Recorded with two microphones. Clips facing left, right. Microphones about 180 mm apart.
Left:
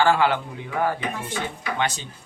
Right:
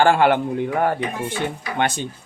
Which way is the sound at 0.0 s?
55° right (ahead or behind).